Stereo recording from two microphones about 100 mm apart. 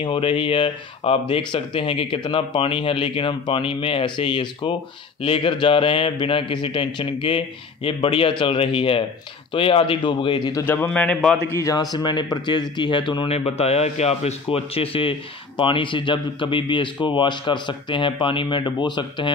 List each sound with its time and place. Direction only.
0.0 s a man's voice: 60° left (ahead or behind)
10.6 s a man's voice: 20° left (ahead or behind)
10.9 s a man's voice: 10° left (ahead or behind)
11.5 s a man's voice: 35° left (ahead or behind)
11.9 s speech: 45° left (ahead or behind)
13.3 s a man's voice: 90° left; by 19.3 s 50° left (ahead or behind)